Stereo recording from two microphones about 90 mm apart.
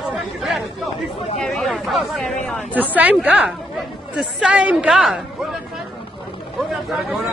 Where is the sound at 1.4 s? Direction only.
5° left (ahead or behind).